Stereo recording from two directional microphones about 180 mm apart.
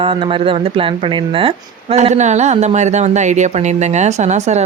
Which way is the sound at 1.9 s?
40° right (ahead or behind).